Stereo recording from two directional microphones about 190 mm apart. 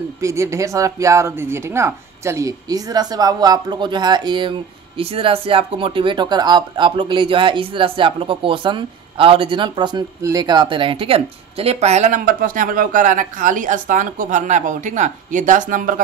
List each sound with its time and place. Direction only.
0.2 s speech: 15° right (ahead or behind); by 16.0 s 45° right (ahead or behind)